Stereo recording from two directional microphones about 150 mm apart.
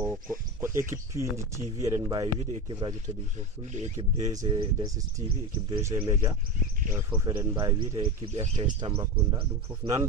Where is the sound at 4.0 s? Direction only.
25° right (ahead or behind).